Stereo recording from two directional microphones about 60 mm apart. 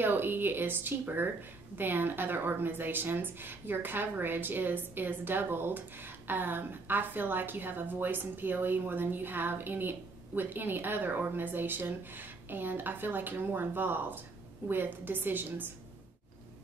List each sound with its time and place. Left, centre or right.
0.0 s a woman's voice: right